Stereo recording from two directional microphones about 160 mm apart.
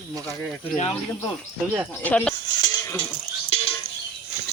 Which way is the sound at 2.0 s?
5° left (ahead or behind).